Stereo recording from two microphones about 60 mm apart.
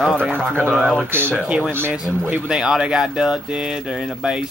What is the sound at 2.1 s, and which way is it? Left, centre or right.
Speech, centre.